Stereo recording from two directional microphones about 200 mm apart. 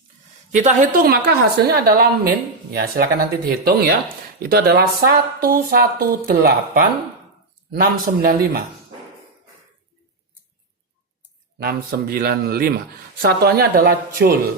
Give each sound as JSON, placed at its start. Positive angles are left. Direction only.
{"t": 0.5, "sound": "speech", "side_deg": -40}
{"t": 11.6, "sound": "speech", "side_deg": -50}